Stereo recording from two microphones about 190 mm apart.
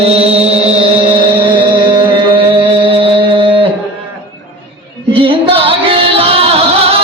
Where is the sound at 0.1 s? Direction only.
30° right (ahead or behind).